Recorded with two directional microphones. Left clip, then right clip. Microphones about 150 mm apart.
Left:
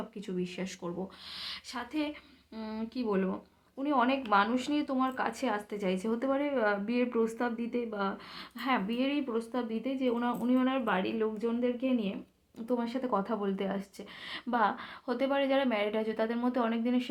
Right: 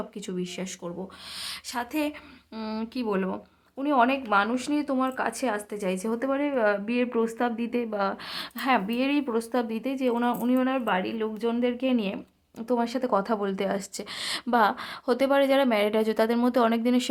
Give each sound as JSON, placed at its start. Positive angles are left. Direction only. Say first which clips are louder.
{"t": 1.5, "sound": "speech", "louder": "right 8 dB", "side_deg": -30}